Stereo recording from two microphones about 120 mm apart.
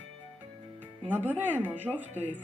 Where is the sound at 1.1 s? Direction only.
15° right (ahead or behind).